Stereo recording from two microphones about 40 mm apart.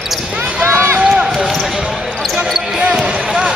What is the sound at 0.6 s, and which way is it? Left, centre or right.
Run, right.